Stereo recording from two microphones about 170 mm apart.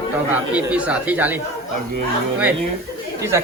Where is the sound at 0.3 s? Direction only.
10° right (ahead or behind).